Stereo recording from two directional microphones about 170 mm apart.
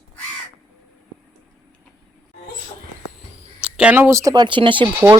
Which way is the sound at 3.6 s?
5° right (ahead or behind).